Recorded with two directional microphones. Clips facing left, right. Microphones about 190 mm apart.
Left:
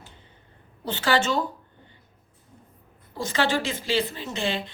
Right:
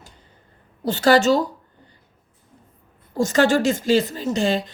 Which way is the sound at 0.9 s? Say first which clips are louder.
Right 8 dB; 40° right (ahead or behind).